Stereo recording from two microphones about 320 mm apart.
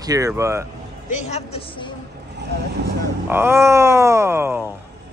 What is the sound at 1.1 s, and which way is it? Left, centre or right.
Speech, left.